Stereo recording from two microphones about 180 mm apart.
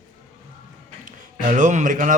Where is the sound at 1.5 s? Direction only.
45° right (ahead or behind).